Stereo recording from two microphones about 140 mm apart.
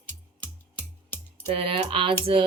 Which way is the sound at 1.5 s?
40° right (ahead or behind).